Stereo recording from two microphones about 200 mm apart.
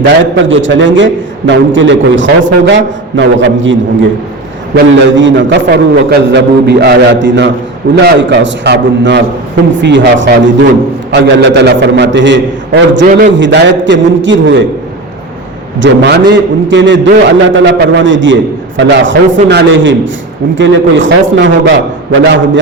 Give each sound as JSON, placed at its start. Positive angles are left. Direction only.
{"t": 0.4, "sound": "a man's voice", "side_deg": -70}
{"t": 12.9, "sound": "a man's voice", "side_deg": -40}
{"t": 13.3, "sound": "a man's voice", "side_deg": -60}
{"t": 15.8, "sound": "a man's voice", "side_deg": -60}